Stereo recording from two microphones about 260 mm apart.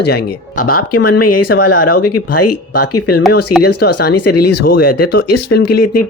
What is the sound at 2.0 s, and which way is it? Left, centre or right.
Speech, left.